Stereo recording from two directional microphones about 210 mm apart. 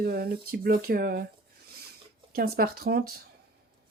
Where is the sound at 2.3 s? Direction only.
45° right (ahead or behind).